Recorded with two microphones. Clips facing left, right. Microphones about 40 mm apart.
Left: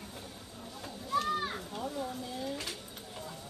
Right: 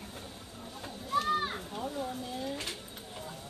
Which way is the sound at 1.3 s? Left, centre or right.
Right.